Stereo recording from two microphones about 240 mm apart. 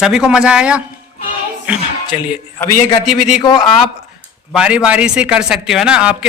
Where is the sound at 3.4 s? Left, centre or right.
Centre.